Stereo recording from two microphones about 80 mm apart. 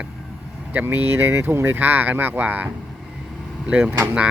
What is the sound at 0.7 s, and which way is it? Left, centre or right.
Speech, right.